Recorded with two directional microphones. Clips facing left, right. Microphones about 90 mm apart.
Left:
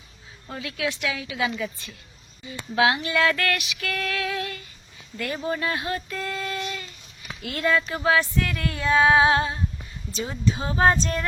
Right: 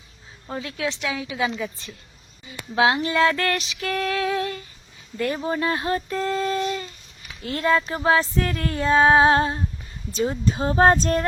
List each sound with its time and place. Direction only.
0.4 s female singing: 25° right (ahead or behind)
2.7 s female singing: 25° right (ahead or behind)
5.4 s speech: 25° right (ahead or behind); by 11.3 s 45° right (ahead or behind)